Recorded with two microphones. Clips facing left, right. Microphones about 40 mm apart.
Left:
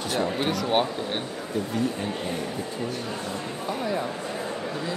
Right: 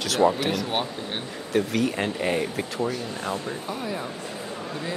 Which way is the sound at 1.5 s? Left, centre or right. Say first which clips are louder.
Right 4 dB; right.